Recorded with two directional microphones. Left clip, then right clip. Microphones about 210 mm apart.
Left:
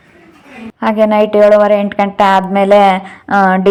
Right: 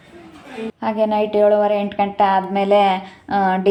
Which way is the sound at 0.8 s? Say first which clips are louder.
Left 8 dB; 20° left (ahead or behind).